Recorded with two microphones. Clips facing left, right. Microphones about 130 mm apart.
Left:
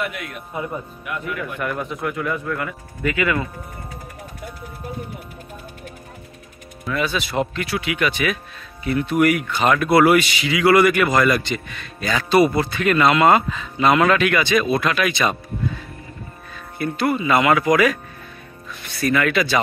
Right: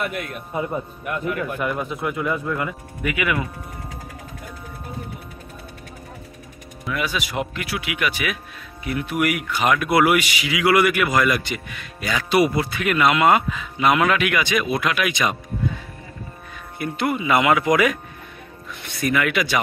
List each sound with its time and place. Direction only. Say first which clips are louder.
1.0 s speech: right 3 dB; 40° right (ahead or behind)
1.6 s speech: even; 15° right (ahead or behind)
6.9 s speech: left 3 dB; 10° right (ahead or behind)
16.5 s speech: left 3 dB; 15° right (ahead or behind)